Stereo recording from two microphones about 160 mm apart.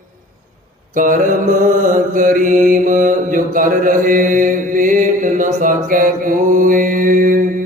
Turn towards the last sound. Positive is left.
turn(degrees=-55)  # may be behind; listen again after turning